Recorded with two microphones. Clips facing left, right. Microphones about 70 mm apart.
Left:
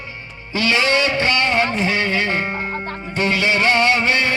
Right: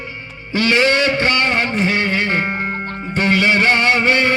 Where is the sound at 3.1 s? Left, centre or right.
Right.